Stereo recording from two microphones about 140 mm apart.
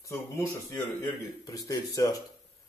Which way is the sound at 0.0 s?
20° left (ahead or behind).